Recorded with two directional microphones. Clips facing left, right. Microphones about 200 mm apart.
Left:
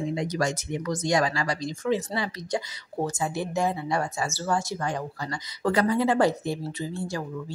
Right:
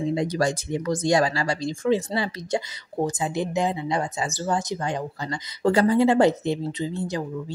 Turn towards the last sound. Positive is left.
turn(degrees=-20)  # may be behind; listen again after turning